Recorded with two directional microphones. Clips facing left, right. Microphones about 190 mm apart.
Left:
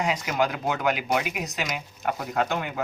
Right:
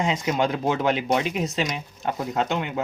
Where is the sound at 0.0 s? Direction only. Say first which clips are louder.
Right 2 dB; 25° right (ahead or behind).